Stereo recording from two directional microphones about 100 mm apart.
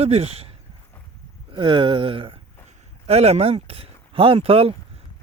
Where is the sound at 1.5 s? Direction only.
55° right (ahead or behind).